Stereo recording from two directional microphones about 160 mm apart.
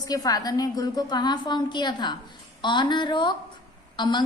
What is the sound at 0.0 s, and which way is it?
A woman's voice, 25° left (ahead or behind).